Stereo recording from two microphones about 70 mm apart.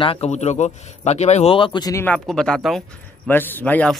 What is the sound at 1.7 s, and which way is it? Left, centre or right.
Speech, left.